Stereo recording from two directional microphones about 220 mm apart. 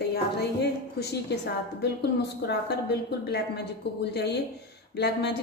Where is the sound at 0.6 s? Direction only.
50° left (ahead or behind).